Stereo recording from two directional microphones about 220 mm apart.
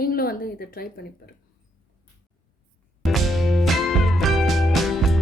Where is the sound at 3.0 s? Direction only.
Centre (ahead or behind).